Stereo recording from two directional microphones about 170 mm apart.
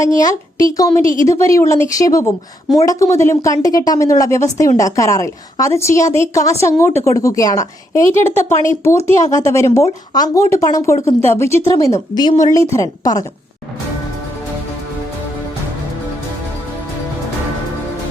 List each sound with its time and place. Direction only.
0.0 s a woman's voice: 20° left (ahead or behind)